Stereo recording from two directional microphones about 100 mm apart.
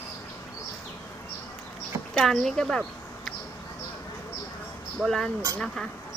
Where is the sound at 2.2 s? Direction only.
5° left (ahead or behind).